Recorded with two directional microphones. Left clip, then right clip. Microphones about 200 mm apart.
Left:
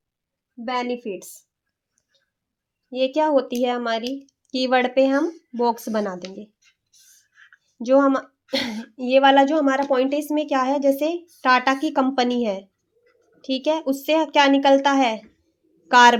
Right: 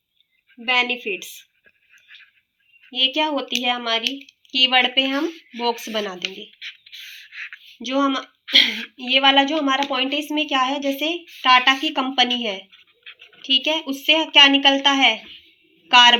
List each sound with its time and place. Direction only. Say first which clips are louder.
0.9 s speech: right 3 dB; 65° left (ahead or behind)
2.9 s speech: left 1 dB; 65° left (ahead or behind)
5.1 s speech: left 2 dB; 40° left (ahead or behind)
5.6 s speech: even; 60° left (ahead or behind)
7.8 s speech: left 4 dB; 60° left (ahead or behind)